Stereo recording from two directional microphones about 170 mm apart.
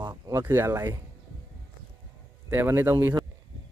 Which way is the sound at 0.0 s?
20° right (ahead or behind).